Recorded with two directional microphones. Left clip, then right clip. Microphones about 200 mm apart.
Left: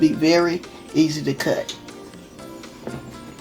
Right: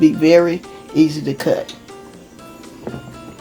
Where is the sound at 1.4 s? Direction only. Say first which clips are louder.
Right 5 dB; 10° right (ahead or behind).